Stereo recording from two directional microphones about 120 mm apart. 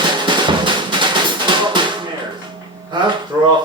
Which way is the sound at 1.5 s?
40° right (ahead or behind).